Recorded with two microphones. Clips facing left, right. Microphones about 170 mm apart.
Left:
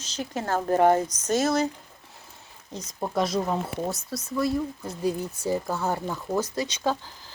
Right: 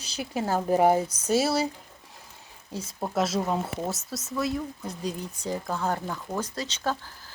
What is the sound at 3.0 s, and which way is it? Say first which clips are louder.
Speech: left 1 dB; 5° right (ahead or behind).